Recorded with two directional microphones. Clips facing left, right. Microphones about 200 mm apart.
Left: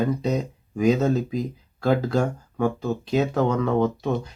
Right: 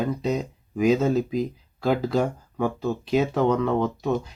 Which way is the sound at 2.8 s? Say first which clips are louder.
Even; 5° right (ahead or behind).